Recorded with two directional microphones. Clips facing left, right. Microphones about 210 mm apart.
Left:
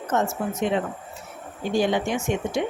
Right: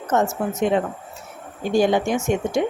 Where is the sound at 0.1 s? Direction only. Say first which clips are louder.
Right 4 dB; 45° right (ahead or behind).